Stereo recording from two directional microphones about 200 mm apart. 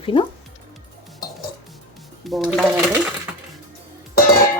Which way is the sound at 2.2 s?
Centre (ahead or behind).